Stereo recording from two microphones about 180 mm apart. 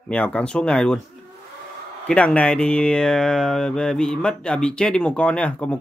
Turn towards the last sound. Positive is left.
turn(degrees=5)  # may be behind; listen again after turning